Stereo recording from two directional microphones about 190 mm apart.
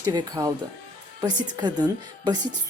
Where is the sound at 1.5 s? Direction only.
20° right (ahead or behind).